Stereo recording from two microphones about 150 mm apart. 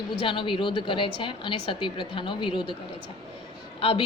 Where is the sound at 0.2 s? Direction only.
35° left (ahead or behind).